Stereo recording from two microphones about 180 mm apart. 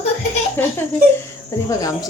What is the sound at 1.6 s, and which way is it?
Speech, 20° left (ahead or behind).